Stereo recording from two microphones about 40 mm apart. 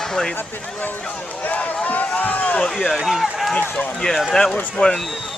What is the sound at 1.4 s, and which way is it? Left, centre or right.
Speech, left.